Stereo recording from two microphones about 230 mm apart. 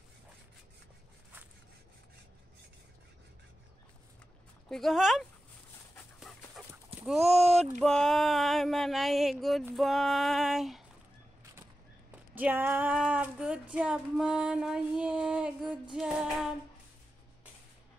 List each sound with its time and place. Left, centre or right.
4.6 s a sound: centre
6.1 s dog: centre
7.0 s clip-clop: centre
7.2 s speech: right
7.8 s a sound: centre
12.4 s female singing: centre